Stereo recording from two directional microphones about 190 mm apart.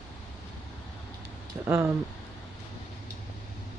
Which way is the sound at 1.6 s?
10° right (ahead or behind).